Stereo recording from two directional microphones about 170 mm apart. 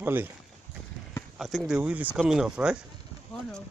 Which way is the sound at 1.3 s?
Centre (ahead or behind).